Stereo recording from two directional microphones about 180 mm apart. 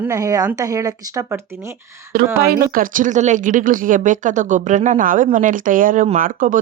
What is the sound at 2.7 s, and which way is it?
Speech, 50° right (ahead or behind).